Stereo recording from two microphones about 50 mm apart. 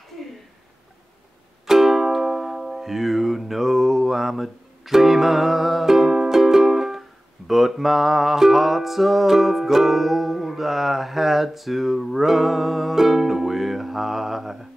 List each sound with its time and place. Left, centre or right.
1.7 s speech: centre